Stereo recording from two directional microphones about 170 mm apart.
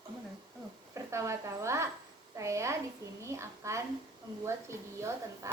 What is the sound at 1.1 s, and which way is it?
Speech, 15° right (ahead or behind).